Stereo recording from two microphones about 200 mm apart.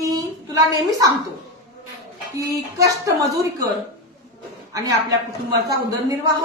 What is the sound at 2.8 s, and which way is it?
Speech, 15° right (ahead or behind).